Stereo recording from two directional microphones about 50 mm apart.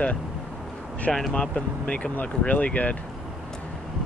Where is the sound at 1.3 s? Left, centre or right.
Left.